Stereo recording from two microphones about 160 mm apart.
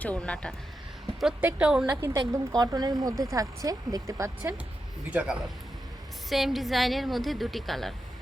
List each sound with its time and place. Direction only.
0.0 s speech: 10° left (ahead or behind)
1.2 s a woman's voice: 5° right (ahead or behind)
2.0 s speech: 20° right (ahead or behind)
5.1 s a woman's voice: 5° right (ahead or behind)